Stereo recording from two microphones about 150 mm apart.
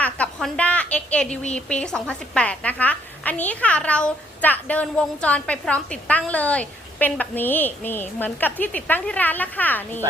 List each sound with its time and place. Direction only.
0.0 s a woman's voice: 5° left (ahead or behind)